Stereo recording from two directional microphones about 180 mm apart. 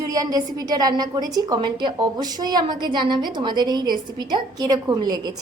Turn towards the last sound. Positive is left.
turn(degrees=-20)  # may be behind; listen again after turning